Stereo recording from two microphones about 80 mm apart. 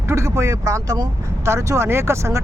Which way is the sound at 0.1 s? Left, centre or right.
Right.